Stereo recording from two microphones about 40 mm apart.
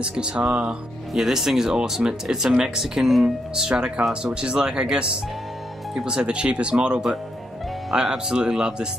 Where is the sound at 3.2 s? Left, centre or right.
Centre.